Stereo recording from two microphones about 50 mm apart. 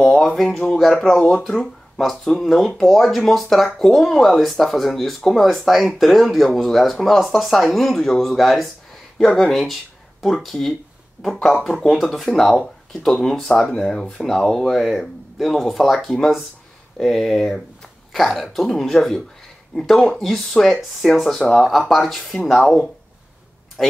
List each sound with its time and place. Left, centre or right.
0.0 s speech: centre
11.3 s speech: left
11.6 s speech: centre